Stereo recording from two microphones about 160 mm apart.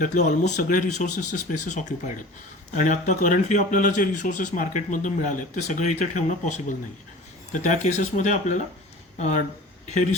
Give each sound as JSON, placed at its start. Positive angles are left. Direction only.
{"t": 0.0, "sound": "speech", "side_deg": 50}
{"t": 9.9, "sound": "speech", "side_deg": 50}